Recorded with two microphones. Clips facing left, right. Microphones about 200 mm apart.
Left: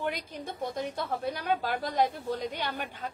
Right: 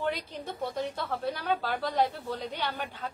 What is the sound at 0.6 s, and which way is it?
A woman's voice, 15° left (ahead or behind).